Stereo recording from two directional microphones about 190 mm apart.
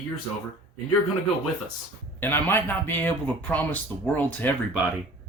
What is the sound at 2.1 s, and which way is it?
Speech, 10° left (ahead or behind).